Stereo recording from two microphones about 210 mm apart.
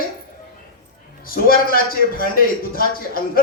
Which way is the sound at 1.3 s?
45° left (ahead or behind).